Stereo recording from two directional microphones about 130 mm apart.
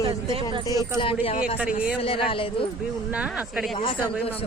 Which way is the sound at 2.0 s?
45° left (ahead or behind).